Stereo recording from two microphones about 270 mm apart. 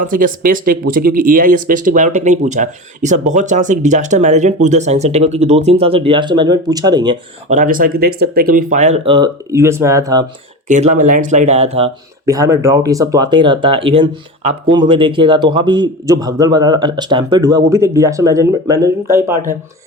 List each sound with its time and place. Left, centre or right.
0.0 s speech: right; by 7.2 s centre
7.5 s speech: right; by 10.2 s centre
10.7 s speech: right
12.2 s speech: centre